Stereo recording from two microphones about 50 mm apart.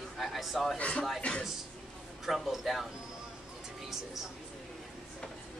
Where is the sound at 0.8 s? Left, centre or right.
Left.